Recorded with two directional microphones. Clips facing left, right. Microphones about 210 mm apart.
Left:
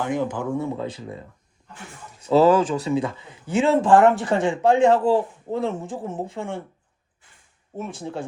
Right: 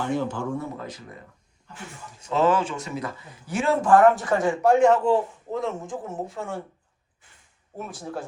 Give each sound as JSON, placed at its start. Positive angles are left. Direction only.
{"t": 0.0, "sound": "speech", "side_deg": 15}
{"t": 0.8, "sound": "speech", "side_deg": 30}
{"t": 2.3, "sound": "speech", "side_deg": 40}
{"t": 7.9, "sound": "speech", "side_deg": 25}